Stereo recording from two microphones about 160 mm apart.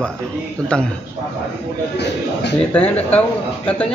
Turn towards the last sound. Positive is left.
turn(degrees=10)  # may be behind; listen again after turning